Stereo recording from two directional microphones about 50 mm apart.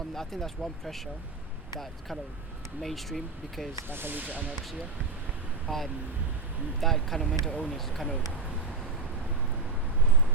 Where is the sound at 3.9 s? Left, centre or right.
Right.